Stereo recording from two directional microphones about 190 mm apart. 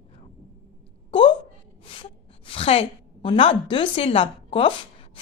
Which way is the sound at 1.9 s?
30° left (ahead or behind).